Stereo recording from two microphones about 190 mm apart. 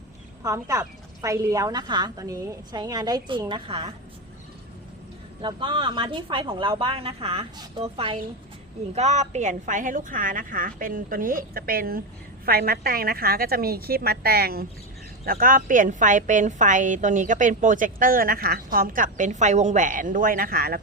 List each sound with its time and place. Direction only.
0.4 s speech: 15° right (ahead or behind)
5.4 s a woman's voice: 25° right (ahead or behind); by 20.8 s 50° right (ahead or behind)